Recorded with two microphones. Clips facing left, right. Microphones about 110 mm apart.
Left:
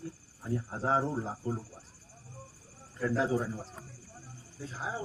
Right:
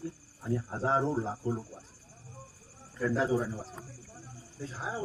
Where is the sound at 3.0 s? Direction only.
Centre (ahead or behind).